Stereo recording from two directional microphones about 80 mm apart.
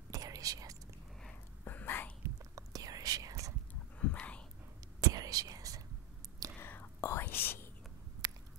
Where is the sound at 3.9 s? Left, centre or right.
Centre.